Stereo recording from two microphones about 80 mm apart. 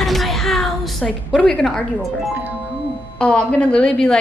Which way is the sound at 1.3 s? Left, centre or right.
Centre.